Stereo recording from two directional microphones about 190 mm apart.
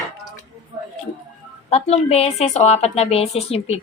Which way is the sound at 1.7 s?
35° left (ahead or behind).